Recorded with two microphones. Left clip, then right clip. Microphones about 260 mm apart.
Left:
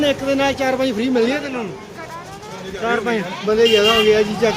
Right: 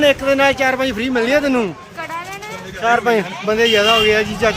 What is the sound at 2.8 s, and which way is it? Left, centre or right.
Speech, right.